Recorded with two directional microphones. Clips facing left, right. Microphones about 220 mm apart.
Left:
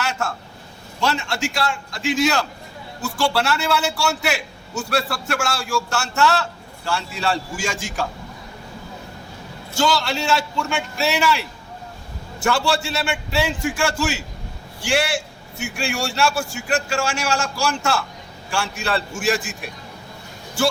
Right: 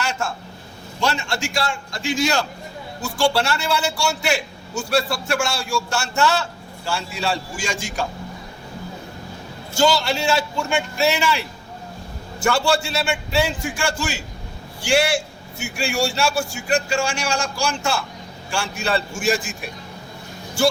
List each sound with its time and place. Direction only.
0.0 s a sound: centre (ahead or behind)
1.0 s a man's voice: centre (ahead or behind)
9.7 s a man's voice: centre (ahead or behind)